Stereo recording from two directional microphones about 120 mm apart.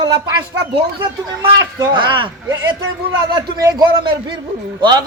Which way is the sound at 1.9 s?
40° right (ahead or behind).